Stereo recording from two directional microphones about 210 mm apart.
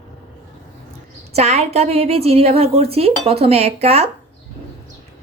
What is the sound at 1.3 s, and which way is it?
A woman's voice, 30° right (ahead or behind).